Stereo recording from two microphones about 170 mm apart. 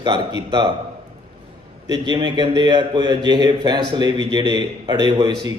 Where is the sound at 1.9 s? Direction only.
25° right (ahead or behind).